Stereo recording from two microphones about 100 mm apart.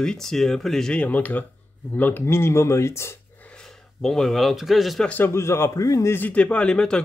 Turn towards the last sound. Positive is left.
turn(degrees=10)  # may be behind; listen again after turning